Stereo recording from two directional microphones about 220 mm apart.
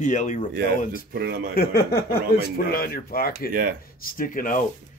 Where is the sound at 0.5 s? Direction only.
45° right (ahead or behind).